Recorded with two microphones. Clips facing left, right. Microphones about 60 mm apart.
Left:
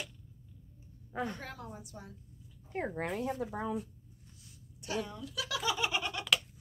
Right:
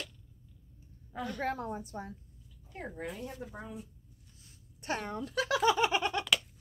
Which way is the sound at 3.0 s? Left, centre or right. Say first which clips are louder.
Left 3 dB; left.